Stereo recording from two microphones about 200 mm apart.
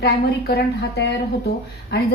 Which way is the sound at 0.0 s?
50° left (ahead or behind).